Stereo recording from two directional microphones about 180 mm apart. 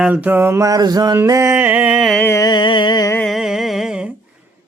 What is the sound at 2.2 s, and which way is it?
Music, 20° left (ahead or behind).